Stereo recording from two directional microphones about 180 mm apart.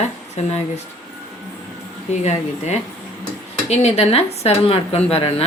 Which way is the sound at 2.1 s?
40° left (ahead or behind).